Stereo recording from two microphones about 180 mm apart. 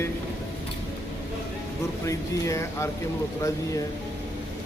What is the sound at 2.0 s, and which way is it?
Speech, 15° left (ahead or behind).